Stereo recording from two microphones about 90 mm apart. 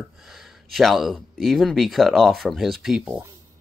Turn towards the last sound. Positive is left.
turn(degrees=0)  # may be behind; listen again after turning